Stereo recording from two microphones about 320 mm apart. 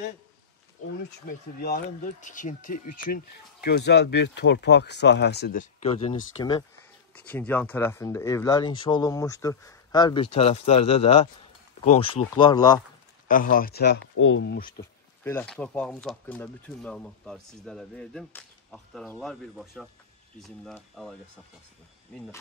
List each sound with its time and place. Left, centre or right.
1.2 s speech: left
7.2 s speech: centre
13.3 s speech: left
15.2 s speech: centre